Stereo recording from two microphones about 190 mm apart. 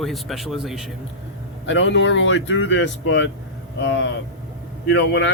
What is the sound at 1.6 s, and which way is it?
Speech, 80° left.